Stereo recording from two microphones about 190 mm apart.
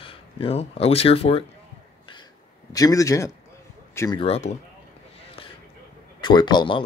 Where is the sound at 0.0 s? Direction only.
30° left (ahead or behind).